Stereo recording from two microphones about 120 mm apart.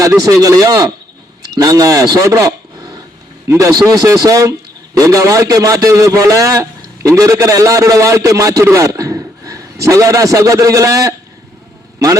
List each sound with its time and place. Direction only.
0.0 s a man's voice: 25° right (ahead or behind)